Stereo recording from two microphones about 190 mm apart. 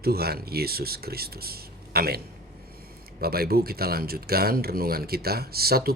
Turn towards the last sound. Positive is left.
turn(degrees=-55)  # may be behind; listen again after turning